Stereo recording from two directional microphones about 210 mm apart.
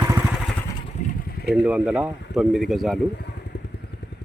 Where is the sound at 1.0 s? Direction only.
35° left (ahead or behind).